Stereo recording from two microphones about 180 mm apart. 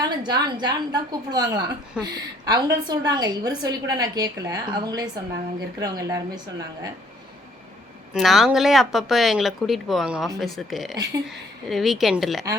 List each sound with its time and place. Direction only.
0.0 s a woman's voice: 25° right (ahead or behind)
8.1 s speech: centre (ahead or behind)